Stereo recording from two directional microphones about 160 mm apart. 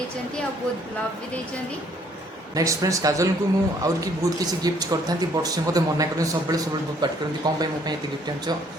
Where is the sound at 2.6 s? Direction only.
20° right (ahead or behind).